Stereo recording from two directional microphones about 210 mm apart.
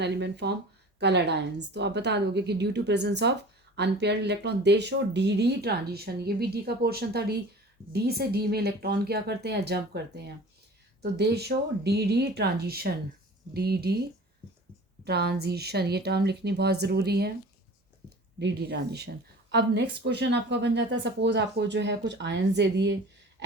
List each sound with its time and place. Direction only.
0.0 s a woman's voice: 55° right (ahead or behind)
15.0 s speech: 50° right (ahead or behind)
18.3 s a woman's voice: 50° right (ahead or behind)